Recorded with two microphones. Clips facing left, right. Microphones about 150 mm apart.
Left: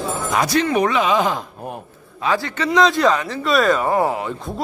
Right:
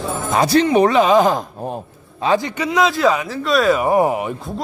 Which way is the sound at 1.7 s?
25° right (ahead or behind).